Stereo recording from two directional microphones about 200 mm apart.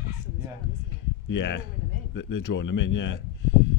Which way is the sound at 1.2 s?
60° left (ahead or behind).